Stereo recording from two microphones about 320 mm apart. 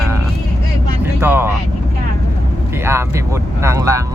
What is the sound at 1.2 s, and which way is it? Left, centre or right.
Speech, centre.